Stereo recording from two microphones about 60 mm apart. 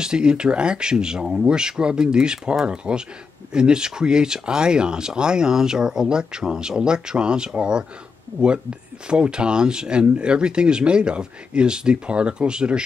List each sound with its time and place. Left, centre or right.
0.0 s speech: centre